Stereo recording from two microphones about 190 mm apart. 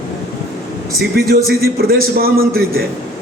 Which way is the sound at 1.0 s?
55° right (ahead or behind).